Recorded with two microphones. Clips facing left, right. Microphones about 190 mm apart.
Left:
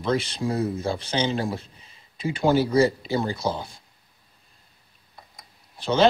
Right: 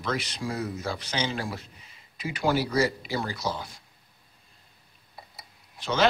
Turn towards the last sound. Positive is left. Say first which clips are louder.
# left 5 dB
turn(degrees=30)  # may be behind; listen again after turning